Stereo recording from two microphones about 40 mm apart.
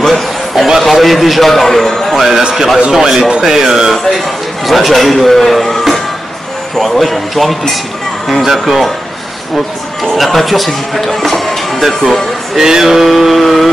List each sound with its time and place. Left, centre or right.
0.0 s a sound: centre
0.8 s a man's voice: centre
2.9 s male singing: centre
3.3 s speech: right
3.5 s male singing: centre
4.6 s speech: centre
8.5 s male singing: centre
10.0 s speech: centre
11.2 s music: centre
12.5 s male singing: centre
13.1 s speech: centre